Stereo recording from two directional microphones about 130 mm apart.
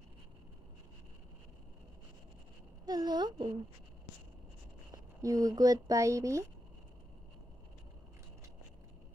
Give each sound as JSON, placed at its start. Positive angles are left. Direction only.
{"t": 2.8, "sound": "a woman's voice", "side_deg": -30}
{"t": 5.2, "sound": "speech", "side_deg": -25}